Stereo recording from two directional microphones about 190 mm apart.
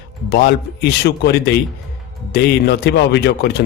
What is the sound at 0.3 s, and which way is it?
Speech, 55° left (ahead or behind).